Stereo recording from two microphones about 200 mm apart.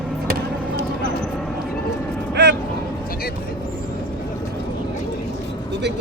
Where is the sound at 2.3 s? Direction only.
55° right (ahead or behind).